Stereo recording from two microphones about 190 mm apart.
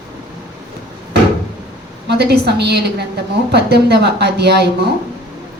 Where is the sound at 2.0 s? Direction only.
60° right (ahead or behind).